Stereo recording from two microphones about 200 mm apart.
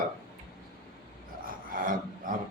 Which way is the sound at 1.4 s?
45° right (ahead or behind).